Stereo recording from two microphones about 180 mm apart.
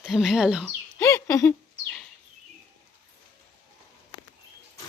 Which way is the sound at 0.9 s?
15° left (ahead or behind).